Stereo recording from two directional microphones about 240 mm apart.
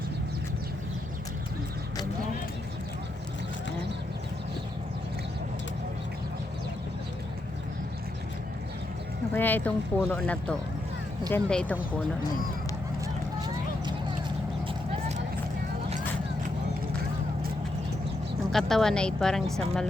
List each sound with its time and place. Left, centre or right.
9.3 s speech: centre
13.4 s a sound: centre
15.9 s vehicle: right
18.5 s speech: centre